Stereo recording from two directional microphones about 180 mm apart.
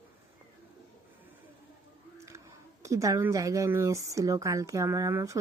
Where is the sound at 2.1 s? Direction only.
15° right (ahead or behind).